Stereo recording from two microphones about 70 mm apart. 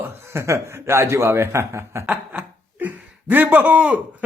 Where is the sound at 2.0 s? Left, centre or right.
Right.